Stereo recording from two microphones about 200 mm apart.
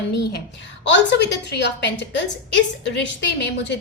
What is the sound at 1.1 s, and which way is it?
A woman's voice, 60° left (ahead or behind).